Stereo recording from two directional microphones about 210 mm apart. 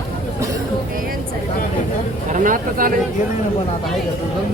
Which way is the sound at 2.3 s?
40° right (ahead or behind).